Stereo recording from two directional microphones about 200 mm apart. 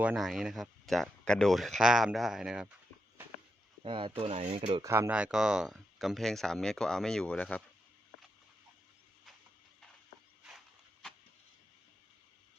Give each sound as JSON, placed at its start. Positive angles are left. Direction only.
{"t": 0.0, "sound": "speech", "side_deg": -5}
{"t": 3.8, "sound": "speech", "side_deg": -25}
{"t": 4.8, "sound": "speech", "side_deg": -10}